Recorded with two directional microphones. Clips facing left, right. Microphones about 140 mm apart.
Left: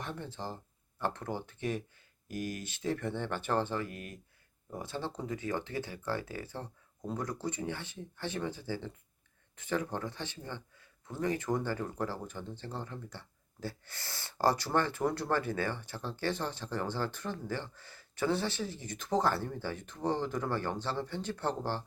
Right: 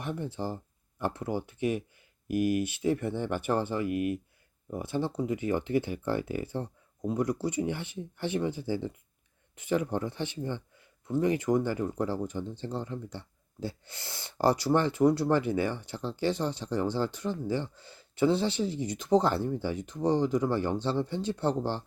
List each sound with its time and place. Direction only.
0.0 s speech: 15° right (ahead or behind)